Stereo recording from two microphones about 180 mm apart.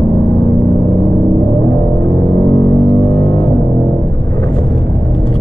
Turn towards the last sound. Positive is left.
turn(degrees=15)  # may be behind; listen again after turning